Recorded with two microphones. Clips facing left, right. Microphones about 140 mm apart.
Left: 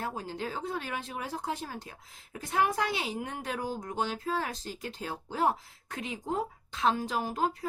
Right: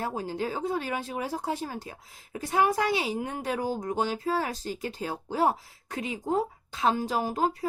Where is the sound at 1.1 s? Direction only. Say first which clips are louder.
Right 5 dB; 40° right (ahead or behind).